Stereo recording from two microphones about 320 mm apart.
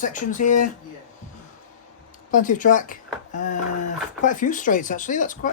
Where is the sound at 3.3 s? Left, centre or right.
Left.